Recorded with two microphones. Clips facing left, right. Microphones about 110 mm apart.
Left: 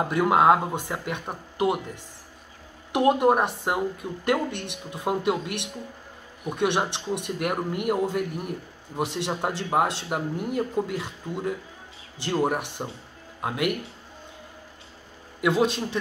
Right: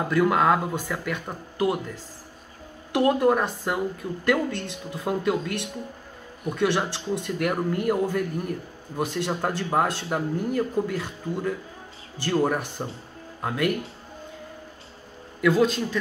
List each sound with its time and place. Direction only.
0.1 s speech: 20° left (ahead or behind)
2.9 s speech: 20° left (ahead or behind)
15.4 s speech: 25° left (ahead or behind)